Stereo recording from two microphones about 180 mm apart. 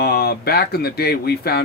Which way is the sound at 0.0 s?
60° left (ahead or behind).